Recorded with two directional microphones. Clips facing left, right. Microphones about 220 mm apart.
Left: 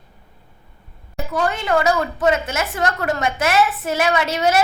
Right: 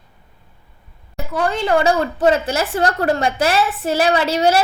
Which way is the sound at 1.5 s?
30° right (ahead or behind).